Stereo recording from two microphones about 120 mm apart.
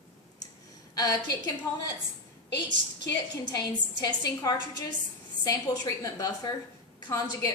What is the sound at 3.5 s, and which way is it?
A woman's voice, 35° left (ahead or behind).